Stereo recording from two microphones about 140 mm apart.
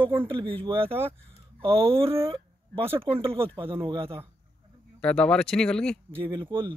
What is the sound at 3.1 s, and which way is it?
Speech, 40° right (ahead or behind).